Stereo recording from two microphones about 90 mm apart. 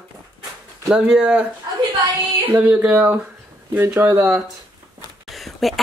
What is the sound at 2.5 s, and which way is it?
Speech, 15° right (ahead or behind).